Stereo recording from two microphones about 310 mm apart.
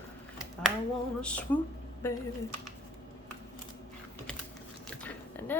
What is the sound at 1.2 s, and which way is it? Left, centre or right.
Speech, centre.